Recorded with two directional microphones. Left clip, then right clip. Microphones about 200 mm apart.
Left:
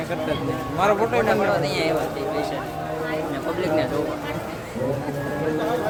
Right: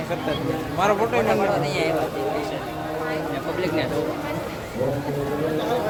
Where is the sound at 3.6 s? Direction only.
20° left (ahead or behind).